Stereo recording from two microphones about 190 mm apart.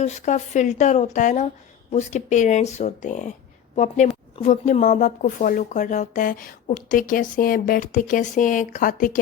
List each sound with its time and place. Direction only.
0.0 s a woman's voice: 35° left (ahead or behind)